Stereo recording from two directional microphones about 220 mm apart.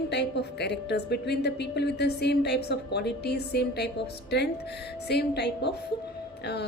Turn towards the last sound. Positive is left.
turn(degrees=50)  # may be behind; listen again after turning